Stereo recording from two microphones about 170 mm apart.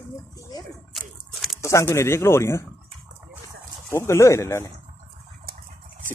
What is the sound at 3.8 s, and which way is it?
Speech, 15° left (ahead or behind).